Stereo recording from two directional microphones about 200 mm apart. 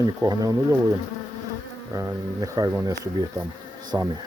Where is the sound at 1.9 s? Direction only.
15° right (ahead or behind).